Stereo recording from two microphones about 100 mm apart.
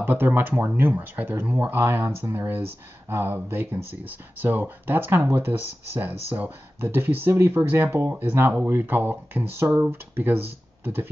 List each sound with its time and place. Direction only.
0.0 s speech: 20° right (ahead or behind)